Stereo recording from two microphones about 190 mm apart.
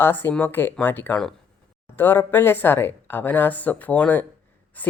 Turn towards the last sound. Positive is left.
turn(degrees=10)  # may be behind; listen again after turning